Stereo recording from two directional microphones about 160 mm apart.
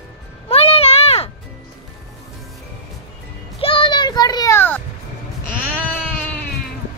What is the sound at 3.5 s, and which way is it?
Children playing, 35° left (ahead or behind).